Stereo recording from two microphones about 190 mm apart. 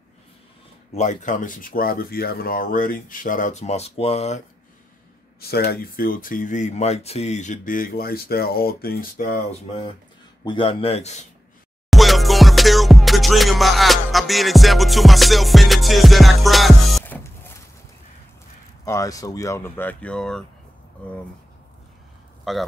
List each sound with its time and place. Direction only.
0.9 s speech: 40° left (ahead or behind)
5.4 s speech: 55° left (ahead or behind)
10.4 s speech: 25° left (ahead or behind)
11.9 s music: centre (ahead or behind)
17.0 s music: 10° left (ahead or behind)
18.9 s speech: 15° left (ahead or behind)
22.4 s speech: centre (ahead or behind)